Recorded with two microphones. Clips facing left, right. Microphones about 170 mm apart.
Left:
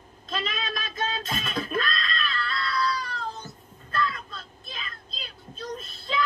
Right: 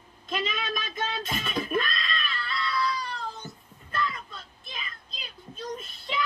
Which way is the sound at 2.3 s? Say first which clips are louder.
Left 1 dB; 15° right (ahead or behind).